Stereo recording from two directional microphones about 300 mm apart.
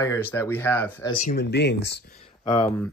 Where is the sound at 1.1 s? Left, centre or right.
Left.